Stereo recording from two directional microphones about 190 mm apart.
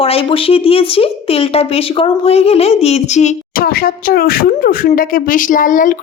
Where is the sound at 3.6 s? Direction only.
50° left (ahead or behind).